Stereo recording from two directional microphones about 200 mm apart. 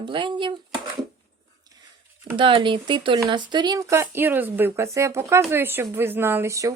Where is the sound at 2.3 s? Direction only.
25° right (ahead or behind).